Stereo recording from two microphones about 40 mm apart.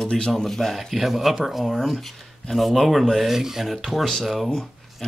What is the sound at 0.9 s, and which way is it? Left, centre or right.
Speech, centre.